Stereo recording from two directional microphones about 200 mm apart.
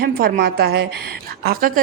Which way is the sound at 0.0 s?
50° right (ahead or behind).